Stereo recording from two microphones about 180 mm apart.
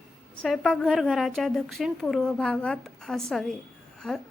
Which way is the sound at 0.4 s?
Centre (ahead or behind).